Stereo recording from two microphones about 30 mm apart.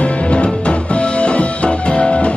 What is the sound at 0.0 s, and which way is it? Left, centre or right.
Music, left.